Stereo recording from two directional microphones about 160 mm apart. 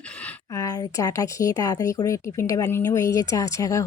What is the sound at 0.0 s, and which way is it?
A woman's voice, 10° left (ahead or behind).